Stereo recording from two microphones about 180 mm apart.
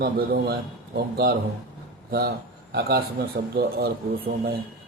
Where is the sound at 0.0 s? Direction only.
55° right (ahead or behind).